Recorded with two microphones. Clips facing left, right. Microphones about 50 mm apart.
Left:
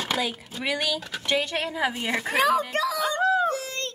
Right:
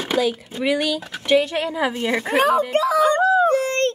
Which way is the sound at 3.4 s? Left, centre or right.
Right.